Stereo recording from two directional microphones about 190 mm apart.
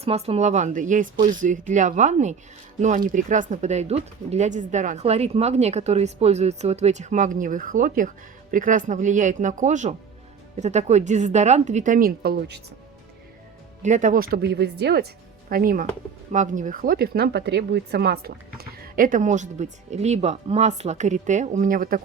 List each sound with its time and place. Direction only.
0.0 s speech: 30° right (ahead or behind); by 12.6 s 60° right (ahead or behind)
13.8 s speech: 40° right (ahead or behind); by 15.0 s 60° right (ahead or behind)
15.4 s speech: 50° right (ahead or behind)